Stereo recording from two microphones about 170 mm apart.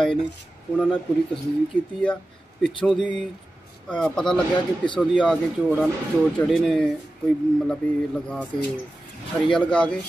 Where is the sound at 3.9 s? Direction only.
5° left (ahead or behind).